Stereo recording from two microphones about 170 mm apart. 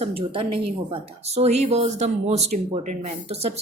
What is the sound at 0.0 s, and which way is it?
A woman's voice, 30° right (ahead or behind).